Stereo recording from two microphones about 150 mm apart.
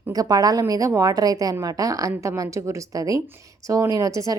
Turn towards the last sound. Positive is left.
turn(degrees=-20)  # may be behind; listen again after turning